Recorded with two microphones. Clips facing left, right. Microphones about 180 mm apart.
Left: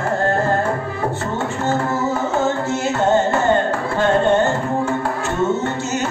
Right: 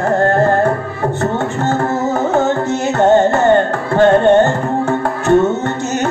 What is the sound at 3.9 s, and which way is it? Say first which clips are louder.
Music: right 7 dB; 60° right (ahead or behind).